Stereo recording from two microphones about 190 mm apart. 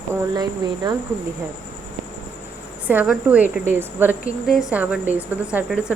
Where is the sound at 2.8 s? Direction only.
5° right (ahead or behind).